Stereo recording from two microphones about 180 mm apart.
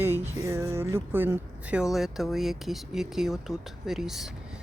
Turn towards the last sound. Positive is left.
turn(degrees=0)  # may be behind; listen again after turning